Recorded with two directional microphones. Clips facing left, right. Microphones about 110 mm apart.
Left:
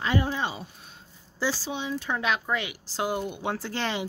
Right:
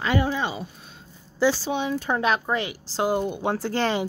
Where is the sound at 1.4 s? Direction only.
65° right (ahead or behind).